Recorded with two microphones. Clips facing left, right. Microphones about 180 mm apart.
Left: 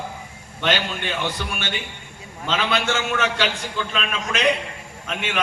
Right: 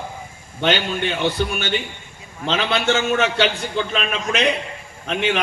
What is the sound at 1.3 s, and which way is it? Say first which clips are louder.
A man's voice: right 7 dB; 40° right (ahead or behind).